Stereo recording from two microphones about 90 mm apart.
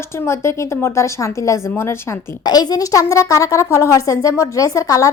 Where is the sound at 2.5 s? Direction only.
45° left (ahead or behind).